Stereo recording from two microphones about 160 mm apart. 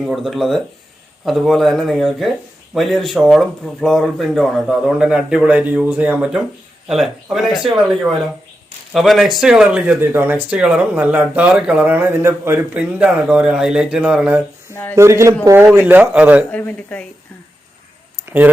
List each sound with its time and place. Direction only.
0.0 s speech: centre (ahead or behind)
8.9 s speech: centre (ahead or behind)
14.7 s speech: 10° left (ahead or behind)
14.9 s speech: 15° right (ahead or behind)
16.5 s a woman's voice: 10° left (ahead or behind)